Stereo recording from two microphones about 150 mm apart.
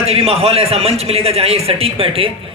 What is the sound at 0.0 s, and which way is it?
A man's voice, 40° right (ahead or behind).